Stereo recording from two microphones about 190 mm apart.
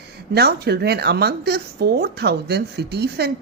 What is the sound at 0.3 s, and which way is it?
Speech, 55° right (ahead or behind).